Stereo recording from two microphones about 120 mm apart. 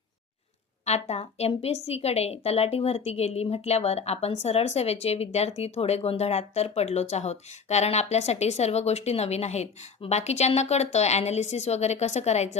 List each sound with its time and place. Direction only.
0.9 s a woman's voice: 65° left (ahead or behind)